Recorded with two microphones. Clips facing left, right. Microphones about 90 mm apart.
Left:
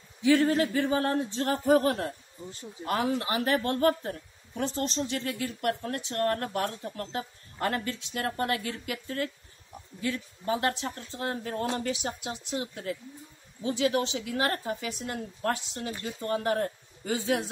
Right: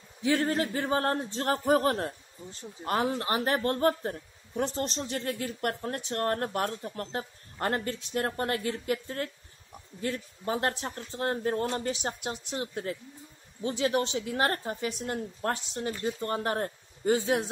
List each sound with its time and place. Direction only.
0.2 s speech: 40° right (ahead or behind)